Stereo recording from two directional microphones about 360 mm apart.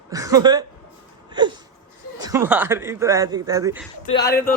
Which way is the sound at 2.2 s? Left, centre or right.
Centre.